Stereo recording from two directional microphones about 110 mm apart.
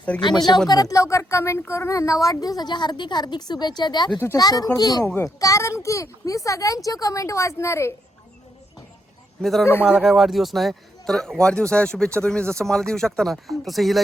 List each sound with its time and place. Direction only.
0.1 s speech: 10° left (ahead or behind)
0.7 s speech: 35° left (ahead or behind)
5.0 s speech: 25° left (ahead or behind)
9.4 s speech: centre (ahead or behind)